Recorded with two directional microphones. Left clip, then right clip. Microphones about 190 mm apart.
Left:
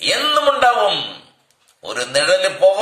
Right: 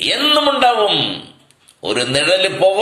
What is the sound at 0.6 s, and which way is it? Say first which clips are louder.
A man's voice: right 1 dB; 20° left (ahead or behind).